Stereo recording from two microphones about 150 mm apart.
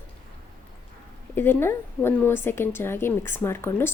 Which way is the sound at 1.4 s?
15° left (ahead or behind).